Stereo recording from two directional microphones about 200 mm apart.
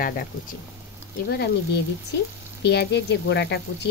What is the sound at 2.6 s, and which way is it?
Speech, 55° left (ahead or behind).